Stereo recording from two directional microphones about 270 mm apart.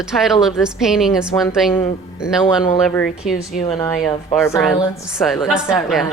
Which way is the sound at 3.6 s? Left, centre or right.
Centre.